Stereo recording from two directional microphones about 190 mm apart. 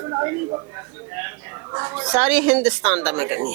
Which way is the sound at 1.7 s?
20° right (ahead or behind).